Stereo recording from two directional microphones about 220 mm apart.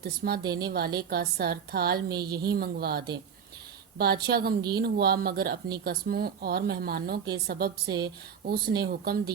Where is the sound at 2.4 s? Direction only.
45° right (ahead or behind).